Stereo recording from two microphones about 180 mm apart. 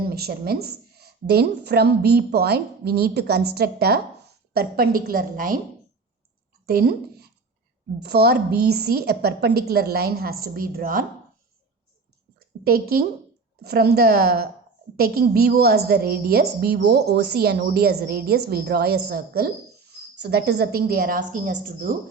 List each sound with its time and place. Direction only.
0.0 s a woman's voice: 60° right (ahead or behind)
6.7 s a woman's voice: 60° right (ahead or behind)
12.6 s a woman's voice: 55° right (ahead or behind)